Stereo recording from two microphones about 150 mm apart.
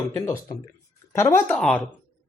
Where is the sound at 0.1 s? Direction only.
20° left (ahead or behind).